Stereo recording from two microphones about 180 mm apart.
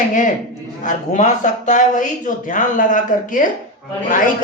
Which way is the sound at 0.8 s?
45° left (ahead or behind).